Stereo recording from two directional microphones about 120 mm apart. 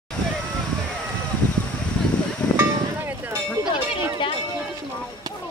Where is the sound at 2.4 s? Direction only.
30° left (ahead or behind).